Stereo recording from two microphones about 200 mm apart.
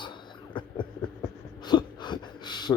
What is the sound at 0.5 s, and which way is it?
Speech, 25° left (ahead or behind).